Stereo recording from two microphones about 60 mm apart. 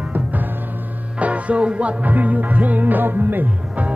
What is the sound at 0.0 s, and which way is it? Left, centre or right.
Music, right.